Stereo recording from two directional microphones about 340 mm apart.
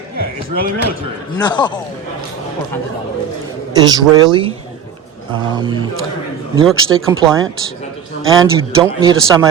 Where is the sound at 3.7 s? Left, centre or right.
Centre.